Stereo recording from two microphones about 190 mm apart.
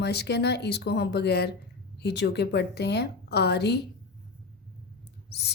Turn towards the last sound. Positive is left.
turn(degrees=60)  # may be behind; listen again after turning